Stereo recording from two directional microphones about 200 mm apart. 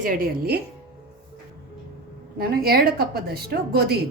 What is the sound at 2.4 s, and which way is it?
A woman's voice, 50° right (ahead or behind).